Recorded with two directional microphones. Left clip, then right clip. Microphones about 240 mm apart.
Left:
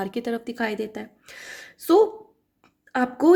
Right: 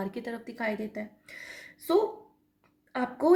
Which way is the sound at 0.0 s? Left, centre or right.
Left.